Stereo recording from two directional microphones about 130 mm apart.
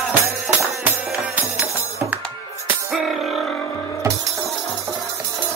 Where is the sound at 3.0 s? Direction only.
Centre (ahead or behind).